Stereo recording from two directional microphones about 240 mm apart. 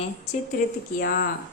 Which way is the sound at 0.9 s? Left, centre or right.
Left.